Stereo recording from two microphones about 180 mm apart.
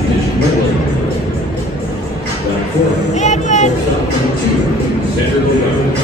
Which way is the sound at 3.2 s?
40° left (ahead or behind).